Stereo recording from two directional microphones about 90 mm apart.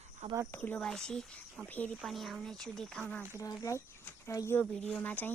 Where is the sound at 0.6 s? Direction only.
10° left (ahead or behind).